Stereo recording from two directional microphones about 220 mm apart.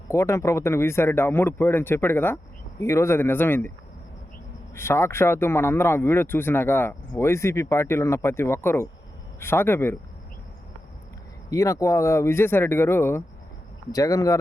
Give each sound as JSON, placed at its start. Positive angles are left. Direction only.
{"t": 0.1, "sound": "speech", "side_deg": 15}
{"t": 4.7, "sound": "speech", "side_deg": 10}
{"t": 11.4, "sound": "speech", "side_deg": 15}